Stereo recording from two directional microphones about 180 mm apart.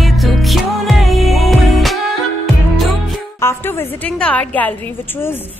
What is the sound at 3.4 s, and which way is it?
A woman's voice, 15° left (ahead or behind).